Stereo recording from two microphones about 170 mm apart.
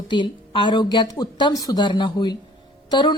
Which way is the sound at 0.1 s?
25° left (ahead or behind).